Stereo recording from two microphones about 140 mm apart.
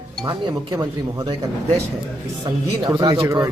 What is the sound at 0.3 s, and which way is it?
Speech, 30° right (ahead or behind).